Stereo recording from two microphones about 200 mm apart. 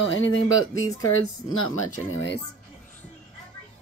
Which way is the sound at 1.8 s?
80° left.